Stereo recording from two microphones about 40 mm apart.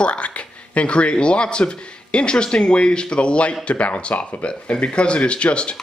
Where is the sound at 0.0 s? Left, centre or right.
Left.